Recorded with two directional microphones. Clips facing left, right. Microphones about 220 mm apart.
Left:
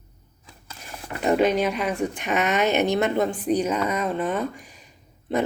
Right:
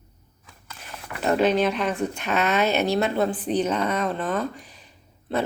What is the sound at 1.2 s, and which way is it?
Speech, 10° left (ahead or behind).